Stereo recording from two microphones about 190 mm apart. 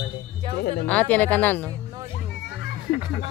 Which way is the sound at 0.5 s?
55° left (ahead or behind).